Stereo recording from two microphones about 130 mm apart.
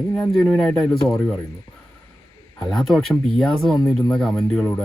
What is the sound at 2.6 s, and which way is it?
Speech, 5° left (ahead or behind).